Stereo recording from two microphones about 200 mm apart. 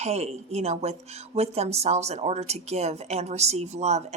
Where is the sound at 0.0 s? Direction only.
35° right (ahead or behind).